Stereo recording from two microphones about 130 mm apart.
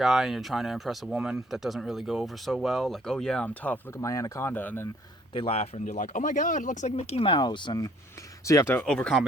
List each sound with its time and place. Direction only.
0.0 s speech: 5° right (ahead or behind)
4.0 s speech: 25° left (ahead or behind)
5.3 s speech: 45° left (ahead or behind)
5.8 s speech: 80° left; by 7.9 s 35° left (ahead or behind)
8.4 s speech: 20° left (ahead or behind)
8.8 s speech: 5° left (ahead or behind)